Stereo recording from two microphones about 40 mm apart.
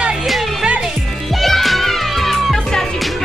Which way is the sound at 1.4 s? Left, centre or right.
Centre.